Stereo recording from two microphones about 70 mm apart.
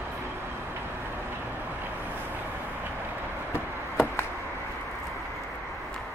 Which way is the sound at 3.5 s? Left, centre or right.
Left.